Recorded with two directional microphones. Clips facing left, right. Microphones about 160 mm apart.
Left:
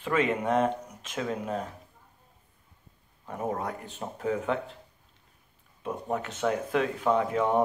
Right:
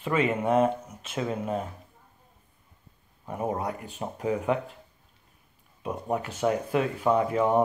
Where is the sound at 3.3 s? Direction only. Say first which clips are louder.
Right 2 dB; 15° right (ahead or behind).